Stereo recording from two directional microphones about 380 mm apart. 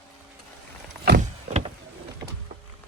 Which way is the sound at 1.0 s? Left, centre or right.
Right.